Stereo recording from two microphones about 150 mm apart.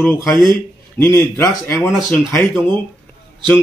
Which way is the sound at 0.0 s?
20° left (ahead or behind).